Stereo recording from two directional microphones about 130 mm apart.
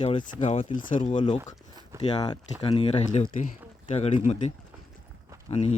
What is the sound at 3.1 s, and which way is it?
Speech, 65° left (ahead or behind).